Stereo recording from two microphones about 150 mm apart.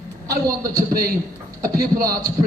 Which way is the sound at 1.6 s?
90° right.